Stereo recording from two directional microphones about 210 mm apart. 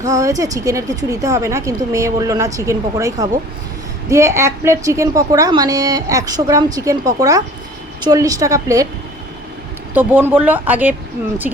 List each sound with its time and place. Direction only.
0.0 s a woman's voice: 15° right (ahead or behind)
9.9 s a woman's voice: 10° right (ahead or behind)